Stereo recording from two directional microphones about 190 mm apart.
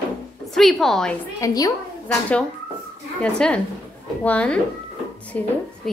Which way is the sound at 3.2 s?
5° left (ahead or behind).